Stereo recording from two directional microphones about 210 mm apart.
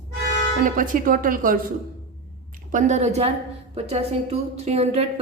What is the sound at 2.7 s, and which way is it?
A woman's voice, 35° right (ahead or behind).